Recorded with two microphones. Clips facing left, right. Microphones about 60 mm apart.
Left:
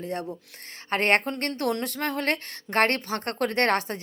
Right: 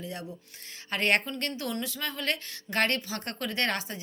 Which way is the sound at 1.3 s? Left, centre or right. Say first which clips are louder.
Left 6 dB; left.